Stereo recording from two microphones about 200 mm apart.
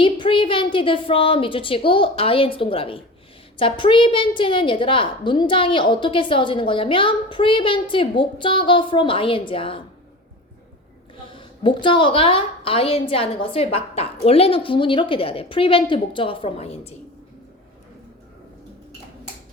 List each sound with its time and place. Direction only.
0.0 s a woman's voice: 25° left (ahead or behind)
11.3 s a woman's voice: 25° left (ahead or behind)